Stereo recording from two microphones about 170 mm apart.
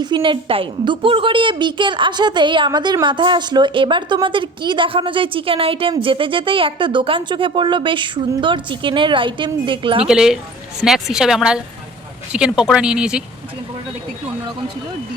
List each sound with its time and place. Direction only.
0.0 s a woman's voice: 30° right (ahead or behind)
10.1 s speech: 5° right (ahead or behind)